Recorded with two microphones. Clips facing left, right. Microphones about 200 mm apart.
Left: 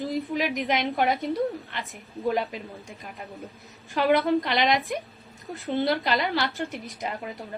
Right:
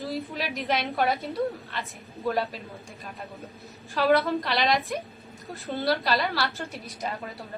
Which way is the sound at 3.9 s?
20° left (ahead or behind).